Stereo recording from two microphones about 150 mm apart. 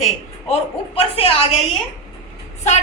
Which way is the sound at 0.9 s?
40° left (ahead or behind).